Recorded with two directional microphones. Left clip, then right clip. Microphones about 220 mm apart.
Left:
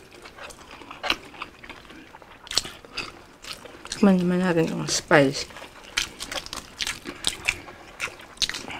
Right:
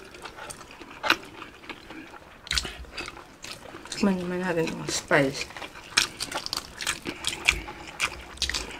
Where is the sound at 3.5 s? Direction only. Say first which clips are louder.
Left 4 dB; 60° left (ahead or behind).